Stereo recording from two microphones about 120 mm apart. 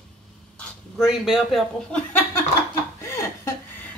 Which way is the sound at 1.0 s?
5° right (ahead or behind).